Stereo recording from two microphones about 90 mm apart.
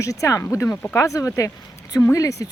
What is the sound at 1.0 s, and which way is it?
Speech, 35° left (ahead or behind).